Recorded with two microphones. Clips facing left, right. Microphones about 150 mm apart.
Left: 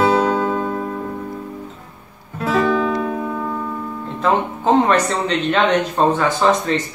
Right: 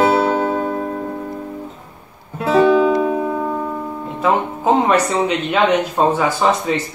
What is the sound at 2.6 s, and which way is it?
Music, 10° right (ahead or behind).